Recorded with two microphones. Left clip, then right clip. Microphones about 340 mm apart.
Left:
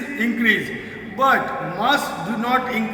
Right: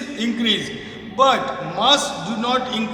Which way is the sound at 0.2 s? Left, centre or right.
Centre.